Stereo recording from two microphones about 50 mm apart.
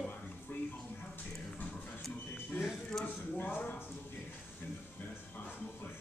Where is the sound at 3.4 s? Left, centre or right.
Left.